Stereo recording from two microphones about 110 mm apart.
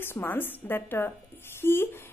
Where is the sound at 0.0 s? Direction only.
20° left (ahead or behind).